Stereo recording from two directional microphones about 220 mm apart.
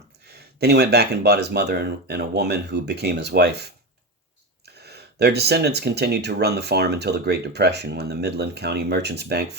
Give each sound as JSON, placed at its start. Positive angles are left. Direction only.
{"t": 0.3, "sound": "speech", "side_deg": -45}